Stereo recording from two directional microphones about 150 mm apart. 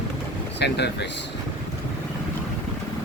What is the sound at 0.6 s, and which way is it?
Speech, 90° left.